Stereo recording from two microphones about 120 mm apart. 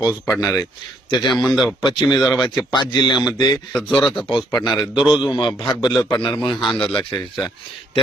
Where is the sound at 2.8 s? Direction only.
40° left (ahead or behind).